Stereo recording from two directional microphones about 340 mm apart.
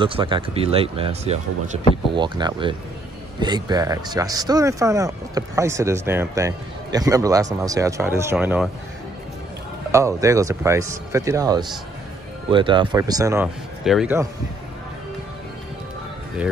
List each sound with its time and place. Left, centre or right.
0.0 s speech: centre
9.8 s speech: centre